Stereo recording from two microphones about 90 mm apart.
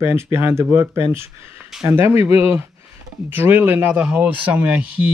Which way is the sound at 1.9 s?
30° right (ahead or behind).